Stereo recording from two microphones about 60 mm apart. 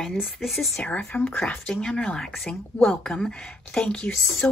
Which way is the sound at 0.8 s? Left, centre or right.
Left.